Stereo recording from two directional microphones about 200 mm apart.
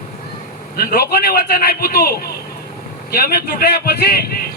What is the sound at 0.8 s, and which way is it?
Speech, 50° left (ahead or behind).